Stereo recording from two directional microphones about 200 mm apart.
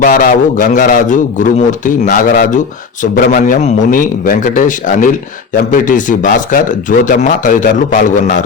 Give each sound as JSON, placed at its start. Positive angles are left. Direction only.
{"t": 0.0, "sound": "a man's voice", "side_deg": 40}